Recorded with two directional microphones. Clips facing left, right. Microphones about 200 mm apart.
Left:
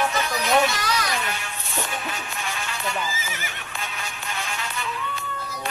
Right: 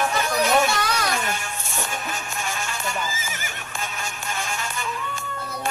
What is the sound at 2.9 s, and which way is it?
Neigh, 45° right (ahead or behind).